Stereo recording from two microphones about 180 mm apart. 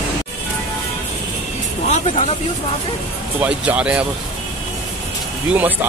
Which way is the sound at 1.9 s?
40° left (ahead or behind).